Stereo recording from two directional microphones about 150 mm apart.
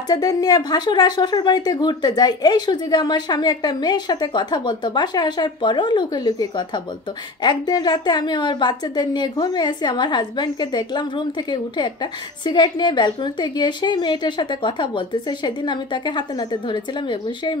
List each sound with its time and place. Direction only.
0.1 s a woman's voice: 25° left (ahead or behind)